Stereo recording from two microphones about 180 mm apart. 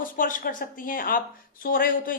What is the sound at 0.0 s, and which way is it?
A woman's voice, 50° left (ahead or behind).